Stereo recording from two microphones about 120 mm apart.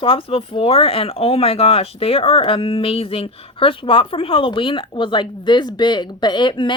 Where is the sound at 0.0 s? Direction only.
50° left (ahead or behind).